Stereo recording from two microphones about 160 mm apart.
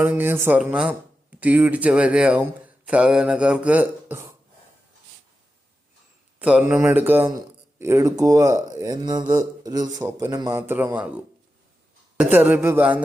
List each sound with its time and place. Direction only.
0.0 s speech: 10° right (ahead or behind)
6.4 s speech: 5° right (ahead or behind)
12.2 s speech: 10° right (ahead or behind)